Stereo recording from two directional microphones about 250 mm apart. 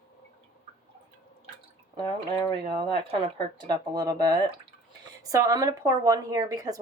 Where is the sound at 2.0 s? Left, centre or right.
Centre.